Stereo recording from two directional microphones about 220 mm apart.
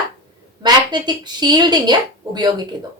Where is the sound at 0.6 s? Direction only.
20° right (ahead or behind).